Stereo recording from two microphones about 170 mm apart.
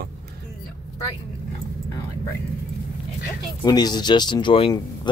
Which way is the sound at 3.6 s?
25° left (ahead or behind).